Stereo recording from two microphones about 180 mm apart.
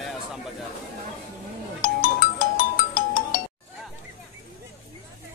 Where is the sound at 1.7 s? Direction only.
50° left (ahead or behind).